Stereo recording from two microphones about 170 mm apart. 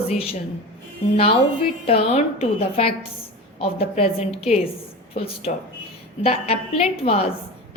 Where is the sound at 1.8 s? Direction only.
35° left (ahead or behind).